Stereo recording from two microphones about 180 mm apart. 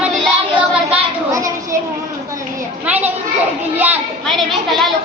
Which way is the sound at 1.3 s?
20° right (ahead or behind).